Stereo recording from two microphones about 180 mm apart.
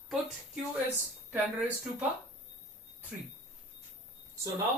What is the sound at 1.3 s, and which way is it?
Speech, 10° right (ahead or behind).